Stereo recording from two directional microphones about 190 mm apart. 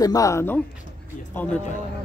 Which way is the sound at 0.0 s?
20° left (ahead or behind).